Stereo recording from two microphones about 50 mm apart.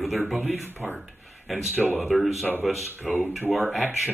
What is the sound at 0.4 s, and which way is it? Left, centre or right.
Speech, right.